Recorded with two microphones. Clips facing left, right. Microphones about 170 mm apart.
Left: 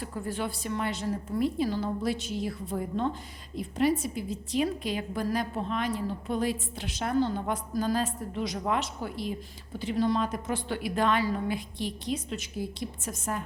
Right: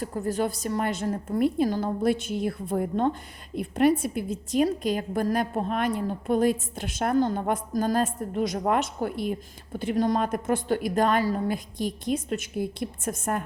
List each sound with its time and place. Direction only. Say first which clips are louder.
0.0 s a woman's voice: right 6 dB; 40° right (ahead or behind)